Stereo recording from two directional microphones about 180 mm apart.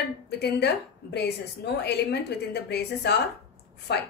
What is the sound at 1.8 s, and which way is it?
A woman's voice, 65° left (ahead or behind).